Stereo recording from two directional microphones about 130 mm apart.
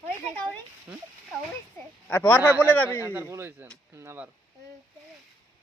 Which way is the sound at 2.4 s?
15° right (ahead or behind).